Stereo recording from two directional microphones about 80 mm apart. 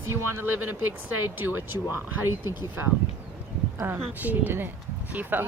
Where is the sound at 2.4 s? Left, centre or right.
Left.